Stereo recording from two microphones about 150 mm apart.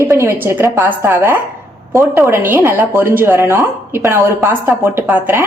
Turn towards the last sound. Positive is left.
turn(degrees=-10)  # may be behind; listen again after turning